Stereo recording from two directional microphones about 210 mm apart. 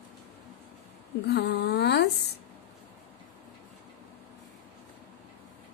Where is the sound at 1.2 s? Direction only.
55° left (ahead or behind).